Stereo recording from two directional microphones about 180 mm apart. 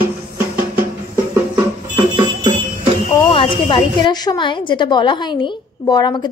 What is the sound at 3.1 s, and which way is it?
A woman's voice, 30° left (ahead or behind).